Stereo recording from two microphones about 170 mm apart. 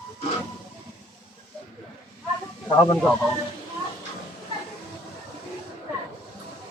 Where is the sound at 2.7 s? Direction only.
25° left (ahead or behind).